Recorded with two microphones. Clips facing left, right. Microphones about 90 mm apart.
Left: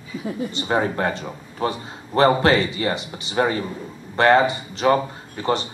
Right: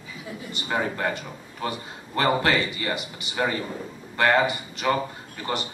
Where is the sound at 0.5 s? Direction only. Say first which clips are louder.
Left 4 dB; 30° left (ahead or behind).